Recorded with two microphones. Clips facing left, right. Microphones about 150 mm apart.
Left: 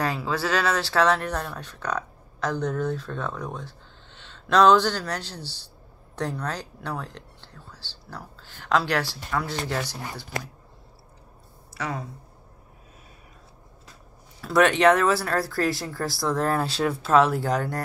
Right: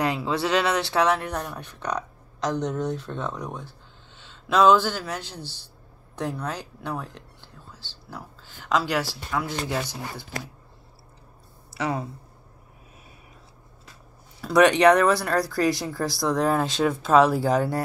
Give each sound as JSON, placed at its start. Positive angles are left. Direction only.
{"t": 0.0, "sound": "speech", "side_deg": -20}
{"t": 14.4, "sound": "speech", "side_deg": 0}